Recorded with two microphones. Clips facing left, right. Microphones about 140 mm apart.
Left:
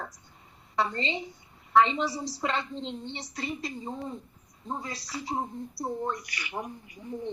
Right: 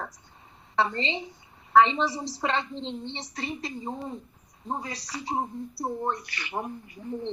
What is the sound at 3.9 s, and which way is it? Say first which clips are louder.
Speech: right 1 dB; 35° right (ahead or behind).